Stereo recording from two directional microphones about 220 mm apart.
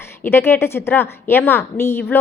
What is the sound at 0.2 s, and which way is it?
A woman's voice, 10° left (ahead or behind).